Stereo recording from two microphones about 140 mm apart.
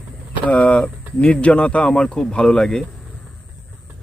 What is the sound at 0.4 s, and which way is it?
Speech, 10° left (ahead or behind).